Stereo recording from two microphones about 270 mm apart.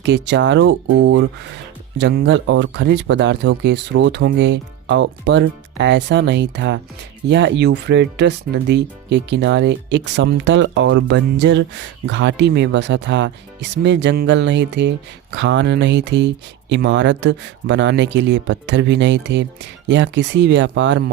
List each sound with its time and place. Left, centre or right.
0.0 s speech: right